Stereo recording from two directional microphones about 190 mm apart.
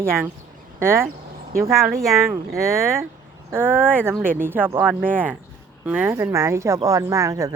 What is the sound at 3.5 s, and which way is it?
Speech, 10° right (ahead or behind).